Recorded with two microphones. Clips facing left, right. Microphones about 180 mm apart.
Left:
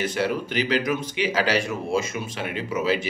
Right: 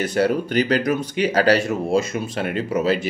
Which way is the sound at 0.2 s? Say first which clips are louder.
Right 9 dB; 45° right (ahead or behind).